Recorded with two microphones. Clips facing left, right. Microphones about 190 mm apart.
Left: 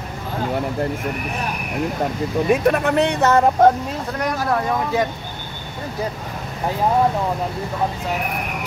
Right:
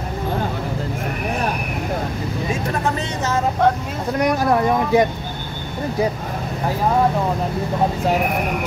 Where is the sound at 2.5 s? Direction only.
65° left (ahead or behind).